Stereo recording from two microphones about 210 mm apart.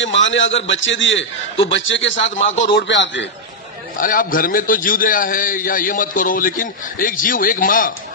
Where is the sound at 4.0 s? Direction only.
40° left (ahead or behind).